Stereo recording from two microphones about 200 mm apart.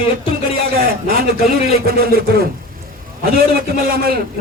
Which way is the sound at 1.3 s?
50° right (ahead or behind).